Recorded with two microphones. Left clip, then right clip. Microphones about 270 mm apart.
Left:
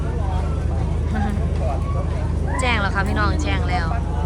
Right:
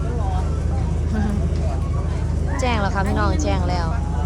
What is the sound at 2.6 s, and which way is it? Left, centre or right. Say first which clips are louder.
Vehicle: left 1 dB; centre.